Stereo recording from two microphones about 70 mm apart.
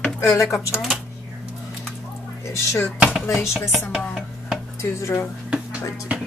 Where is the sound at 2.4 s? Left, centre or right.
Left.